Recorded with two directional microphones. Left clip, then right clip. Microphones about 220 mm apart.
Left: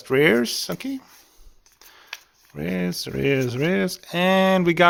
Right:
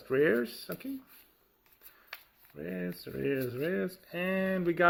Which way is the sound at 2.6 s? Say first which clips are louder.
Left 12 dB; 45° left (ahead or behind).